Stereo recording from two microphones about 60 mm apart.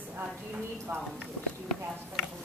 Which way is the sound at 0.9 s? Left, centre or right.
Right.